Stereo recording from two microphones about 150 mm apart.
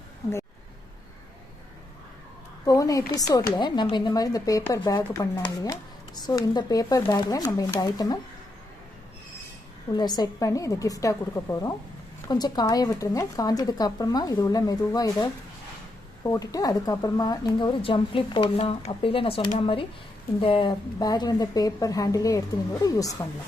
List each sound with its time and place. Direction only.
2.6 s speech: 25° left (ahead or behind)
9.9 s a woman's voice: 30° left (ahead or behind)